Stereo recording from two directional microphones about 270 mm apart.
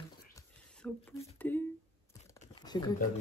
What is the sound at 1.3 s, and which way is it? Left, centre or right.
Speech, centre.